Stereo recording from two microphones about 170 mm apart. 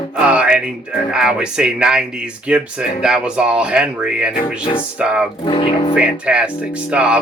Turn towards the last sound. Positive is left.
turn(degrees=-5)  # may be behind; listen again after turning